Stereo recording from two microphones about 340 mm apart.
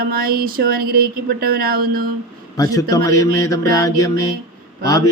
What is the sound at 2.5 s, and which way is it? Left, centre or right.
Speech, centre.